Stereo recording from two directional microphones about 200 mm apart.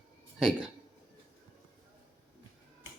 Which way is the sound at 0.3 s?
Centre (ahead or behind).